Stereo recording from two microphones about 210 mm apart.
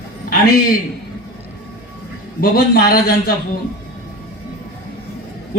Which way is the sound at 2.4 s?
45° left (ahead or behind).